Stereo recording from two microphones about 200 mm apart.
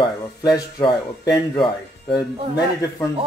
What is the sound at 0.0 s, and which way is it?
Speech, 20° left (ahead or behind).